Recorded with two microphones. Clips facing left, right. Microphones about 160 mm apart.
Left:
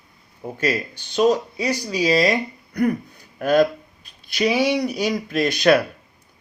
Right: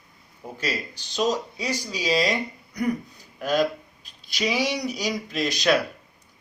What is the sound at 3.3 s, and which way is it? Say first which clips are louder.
Speech: left 6 dB; 60° left (ahead or behind).